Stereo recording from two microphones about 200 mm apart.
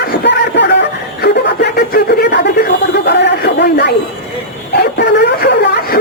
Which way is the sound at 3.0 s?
55° left (ahead or behind).